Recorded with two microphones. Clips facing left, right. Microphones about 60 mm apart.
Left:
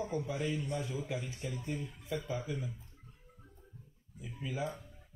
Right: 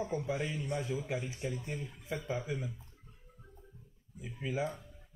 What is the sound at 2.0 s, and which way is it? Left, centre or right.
Speech, right.